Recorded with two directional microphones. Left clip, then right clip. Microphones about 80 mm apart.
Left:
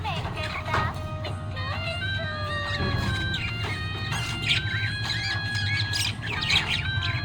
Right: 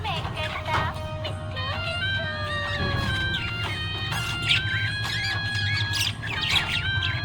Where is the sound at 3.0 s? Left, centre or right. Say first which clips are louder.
Right 2 dB; right.